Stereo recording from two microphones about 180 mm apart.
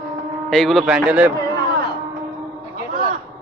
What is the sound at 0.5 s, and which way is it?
Speech, centre (ahead or behind).